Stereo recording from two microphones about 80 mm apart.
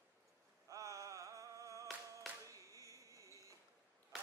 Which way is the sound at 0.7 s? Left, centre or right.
Right.